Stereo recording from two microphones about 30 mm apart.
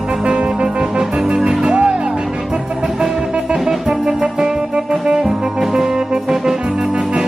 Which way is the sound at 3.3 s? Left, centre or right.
Right.